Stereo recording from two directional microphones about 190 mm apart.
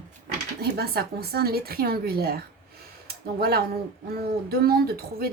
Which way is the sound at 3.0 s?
55° right (ahead or behind).